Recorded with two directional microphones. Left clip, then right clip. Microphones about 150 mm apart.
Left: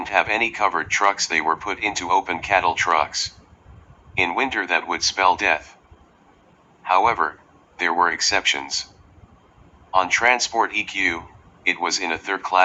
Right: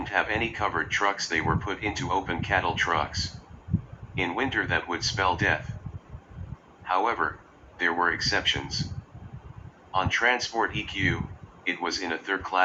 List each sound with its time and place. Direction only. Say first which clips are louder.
0.0 s speech: left 7 dB; 30° left (ahead or behind)
6.8 s speech: left 7 dB; 30° left (ahead or behind)
9.9 s speech: left 7 dB; 30° left (ahead or behind)